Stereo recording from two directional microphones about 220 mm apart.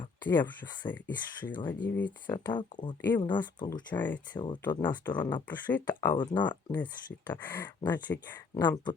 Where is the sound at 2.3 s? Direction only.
20° left (ahead or behind).